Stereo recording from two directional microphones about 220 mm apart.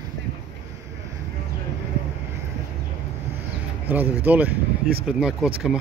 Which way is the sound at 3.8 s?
10° right (ahead or behind).